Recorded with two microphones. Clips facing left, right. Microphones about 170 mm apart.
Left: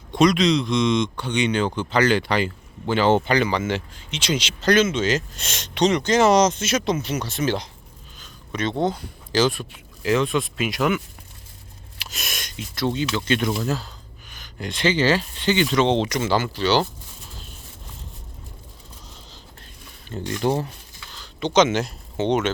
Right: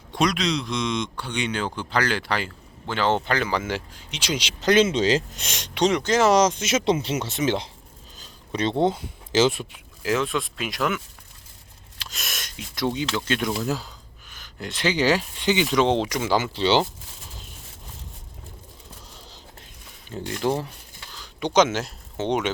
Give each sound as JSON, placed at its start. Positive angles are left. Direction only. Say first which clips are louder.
{"t": 0.1, "sound": "speech", "louder": "left 6 dB", "side_deg": -5}
{"t": 4.7, "sound": "speech", "louder": "even", "side_deg": -30}
{"t": 5.3, "sound": "speech", "louder": "left 1 dB", "side_deg": -15}
{"t": 6.8, "sound": "speech", "louder": "right 1 dB", "side_deg": -30}
{"t": 8.2, "sound": "a sound", "louder": "right 1 dB", "side_deg": -30}
{"t": 8.8, "sound": "speech", "louder": "right 1 dB", "side_deg": -25}
{"t": 9.7, "sound": "speech", "louder": "left 3 dB", "side_deg": -5}
{"t": 12.0, "sound": "a sound", "louder": "left 2 dB", "side_deg": 0}
{"t": 13.0, "sound": "speech", "louder": "left 3 dB", "side_deg": -5}
{"t": 14.3, "sound": "a sound", "louder": "left 3 dB", "side_deg": 0}
{"t": 14.9, "sound": "speech", "louder": "left 1 dB", "side_deg": -10}
{"t": 16.4, "sound": "speech", "louder": "even", "side_deg": -25}
{"t": 20.1, "sound": "speech", "louder": "left 2 dB", "side_deg": -5}
{"t": 21.1, "sound": "speech", "louder": "left 2 dB", "side_deg": -10}